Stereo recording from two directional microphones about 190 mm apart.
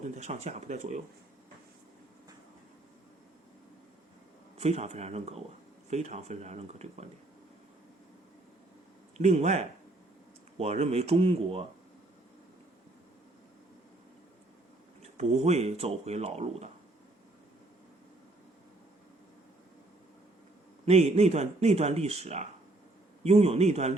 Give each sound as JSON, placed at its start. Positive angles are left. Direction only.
{"t": 0.0, "sound": "speech", "side_deg": -40}
{"t": 4.5, "sound": "speech", "side_deg": -35}
{"t": 9.1, "sound": "speech", "side_deg": -35}
{"t": 15.0, "sound": "speech", "side_deg": -35}
{"t": 20.8, "sound": "speech", "side_deg": -35}